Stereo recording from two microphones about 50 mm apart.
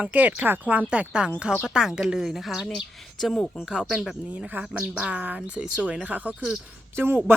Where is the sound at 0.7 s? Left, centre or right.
Right; by 3.4 s centre.